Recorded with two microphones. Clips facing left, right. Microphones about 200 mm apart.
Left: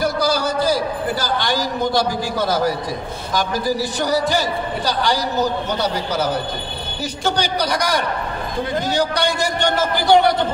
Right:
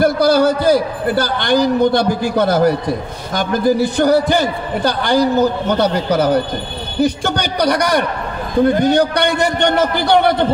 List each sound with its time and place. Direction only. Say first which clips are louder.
0.0 s a man's voice: right 7 dB; 55° right (ahead or behind)